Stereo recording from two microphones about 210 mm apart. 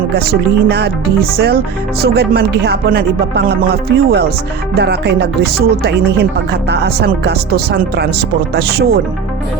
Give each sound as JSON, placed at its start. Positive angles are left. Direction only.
{"t": 0.1, "sound": "music", "side_deg": -50}